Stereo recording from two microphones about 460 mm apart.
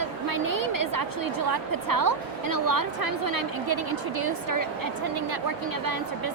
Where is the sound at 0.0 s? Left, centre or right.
Right.